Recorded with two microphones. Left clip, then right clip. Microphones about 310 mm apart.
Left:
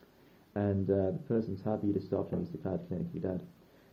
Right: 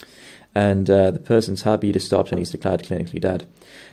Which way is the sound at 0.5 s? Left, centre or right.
Right.